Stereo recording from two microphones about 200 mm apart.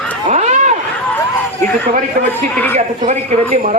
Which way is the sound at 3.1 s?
35° right (ahead or behind).